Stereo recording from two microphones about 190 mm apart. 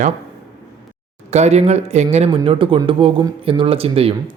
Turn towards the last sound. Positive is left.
turn(degrees=-30)  # may be behind; listen again after turning